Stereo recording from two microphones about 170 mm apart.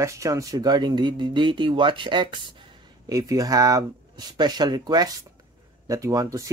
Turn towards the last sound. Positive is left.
turn(degrees=-20)  # may be behind; listen again after turning